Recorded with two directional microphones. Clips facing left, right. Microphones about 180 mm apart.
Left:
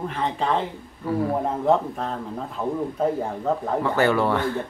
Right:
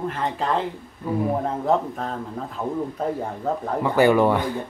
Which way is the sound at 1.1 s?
15° right (ahead or behind).